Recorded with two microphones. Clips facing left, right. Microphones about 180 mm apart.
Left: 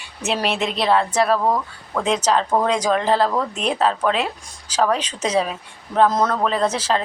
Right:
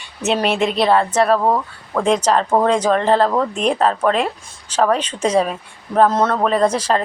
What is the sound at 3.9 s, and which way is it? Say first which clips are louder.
Speech: right 3 dB; centre (ahead or behind).